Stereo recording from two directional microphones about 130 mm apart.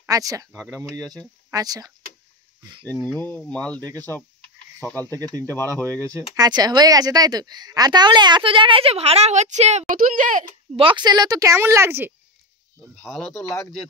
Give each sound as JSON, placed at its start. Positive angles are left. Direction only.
{"t": 0.0, "sound": "speech", "side_deg": -25}
{"t": 0.5, "sound": "speech", "side_deg": 5}
{"t": 0.7, "sound": "speech", "side_deg": -25}
{"t": 3.3, "sound": "speech", "side_deg": 10}
{"t": 4.8, "sound": "speech", "side_deg": 10}
{"t": 5.1, "sound": "a woman's voice", "side_deg": -30}
{"t": 10.8, "sound": "speech", "side_deg": -40}
{"t": 12.8, "sound": "speech", "side_deg": 0}